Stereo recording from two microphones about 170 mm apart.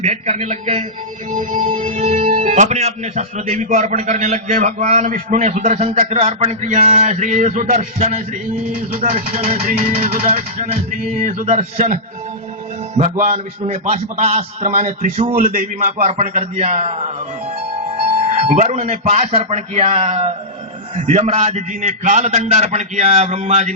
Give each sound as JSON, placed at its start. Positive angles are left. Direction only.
{"t": 0.0, "sound": "a man's voice", "side_deg": -40}
{"t": 1.6, "sound": "speech", "side_deg": -35}
{"t": 9.4, "sound": "speech", "side_deg": -40}
{"t": 13.0, "sound": "speech", "side_deg": -45}
{"t": 18.3, "sound": "a man's voice", "side_deg": -40}